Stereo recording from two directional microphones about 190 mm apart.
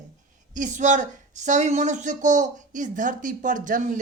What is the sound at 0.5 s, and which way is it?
Speech, 40° right (ahead or behind).